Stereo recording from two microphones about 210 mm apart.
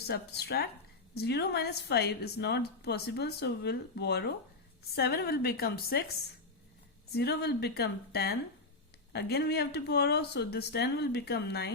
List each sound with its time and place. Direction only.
0.1 s a woman's voice: 50° left (ahead or behind)
7.1 s a woman's voice: 50° left (ahead or behind)